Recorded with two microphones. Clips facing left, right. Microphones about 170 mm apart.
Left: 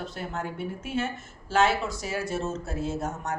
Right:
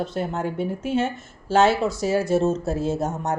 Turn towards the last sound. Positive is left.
turn(degrees=-25)  # may be behind; listen again after turning